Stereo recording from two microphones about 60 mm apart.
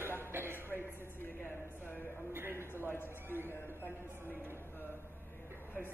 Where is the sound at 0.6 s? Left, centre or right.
Left.